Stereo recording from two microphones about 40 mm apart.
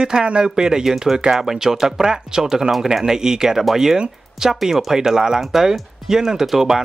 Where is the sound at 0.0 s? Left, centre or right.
Right.